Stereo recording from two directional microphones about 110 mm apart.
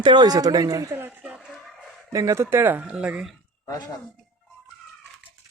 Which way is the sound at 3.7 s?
30° left (ahead or behind).